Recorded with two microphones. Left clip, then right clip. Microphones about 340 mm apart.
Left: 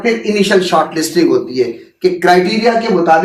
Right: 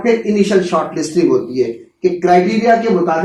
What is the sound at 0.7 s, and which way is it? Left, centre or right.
Speech, left.